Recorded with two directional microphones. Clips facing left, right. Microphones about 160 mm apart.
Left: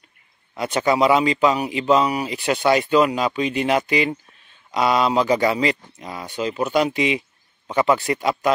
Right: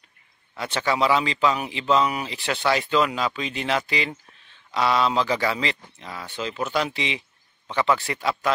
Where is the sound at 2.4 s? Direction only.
15° left (ahead or behind).